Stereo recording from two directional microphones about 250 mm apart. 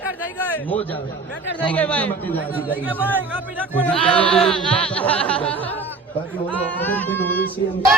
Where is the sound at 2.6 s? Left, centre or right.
Centre.